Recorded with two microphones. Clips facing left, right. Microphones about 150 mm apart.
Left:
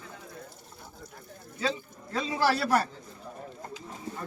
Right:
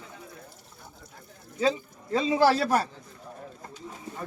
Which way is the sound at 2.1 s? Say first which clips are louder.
Right 5 dB; 20° right (ahead or behind).